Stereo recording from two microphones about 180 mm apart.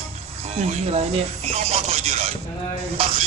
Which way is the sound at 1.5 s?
35° right (ahead or behind).